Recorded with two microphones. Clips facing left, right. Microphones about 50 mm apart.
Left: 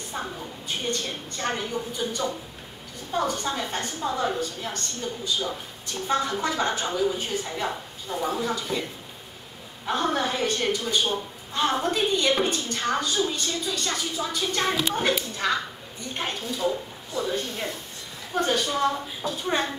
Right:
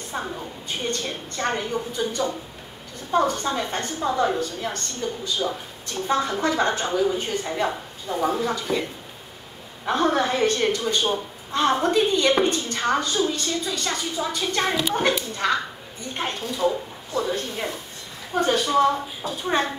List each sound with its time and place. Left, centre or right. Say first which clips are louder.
0.1 s a woman's voice: right 3 dB; centre
9.8 s a woman's voice: right 4 dB; centre